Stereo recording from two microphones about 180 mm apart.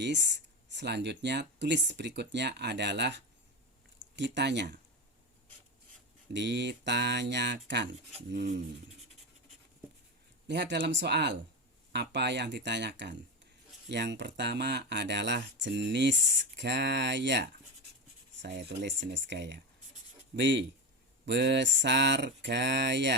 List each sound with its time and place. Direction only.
0.0 s speech: 75° right (ahead or behind)
6.3 s speech: 75° right (ahead or behind)
10.4 s speech: 75° right (ahead or behind)
18.4 s speech: 70° right (ahead or behind)
21.2 s speech: 70° right (ahead or behind)